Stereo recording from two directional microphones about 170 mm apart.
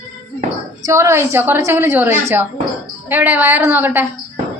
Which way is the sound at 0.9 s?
15° right (ahead or behind).